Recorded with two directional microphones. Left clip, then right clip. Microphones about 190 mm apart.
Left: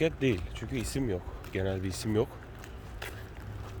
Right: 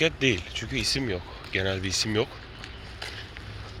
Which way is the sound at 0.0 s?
10° left (ahead or behind).